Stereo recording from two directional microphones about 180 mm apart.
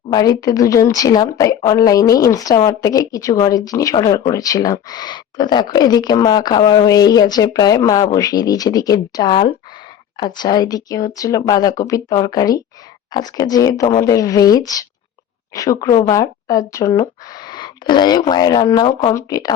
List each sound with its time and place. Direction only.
0.1 s a woman's voice: 20° left (ahead or behind)